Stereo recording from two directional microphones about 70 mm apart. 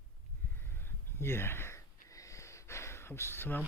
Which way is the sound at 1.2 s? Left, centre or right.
Left.